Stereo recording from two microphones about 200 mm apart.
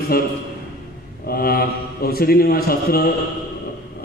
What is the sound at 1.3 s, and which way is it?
A man's voice, 50° left (ahead or behind).